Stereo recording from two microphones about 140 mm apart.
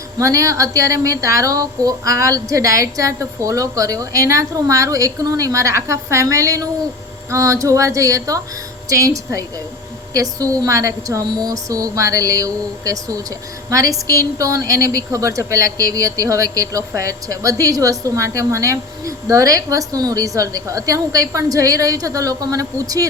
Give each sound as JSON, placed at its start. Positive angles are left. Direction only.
{"t": 0.2, "sound": "a woman's voice", "side_deg": -20}